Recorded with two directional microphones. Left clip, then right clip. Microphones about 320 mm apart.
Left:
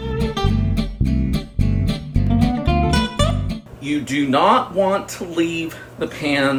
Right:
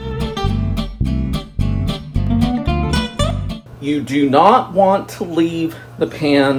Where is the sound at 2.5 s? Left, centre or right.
Centre.